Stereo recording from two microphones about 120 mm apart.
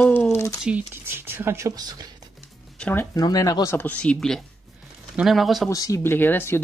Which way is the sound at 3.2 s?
30° left (ahead or behind).